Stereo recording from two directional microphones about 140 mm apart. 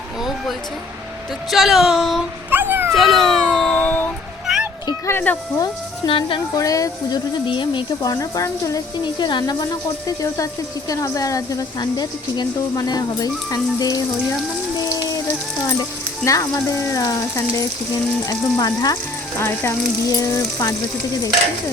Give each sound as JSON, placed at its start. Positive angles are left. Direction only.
{"t": 1.5, "sound": "a sound", "side_deg": 0}
{"t": 2.5, "sound": "dog", "side_deg": -15}
{"t": 2.9, "sound": "cat", "side_deg": 0}
{"t": 4.4, "sound": "a sound", "side_deg": -5}
{"t": 4.9, "sound": "speech", "side_deg": 15}
{"t": 6.1, "sound": "speech", "side_deg": 35}
{"t": 6.6, "sound": "speech", "side_deg": 25}
{"t": 7.4, "sound": "speech", "side_deg": 35}
{"t": 15.6, "sound": "speech", "side_deg": 20}